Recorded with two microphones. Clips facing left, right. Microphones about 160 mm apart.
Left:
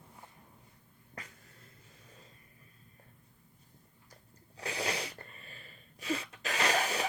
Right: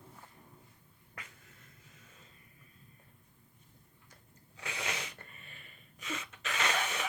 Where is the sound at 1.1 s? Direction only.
35° left (ahead or behind).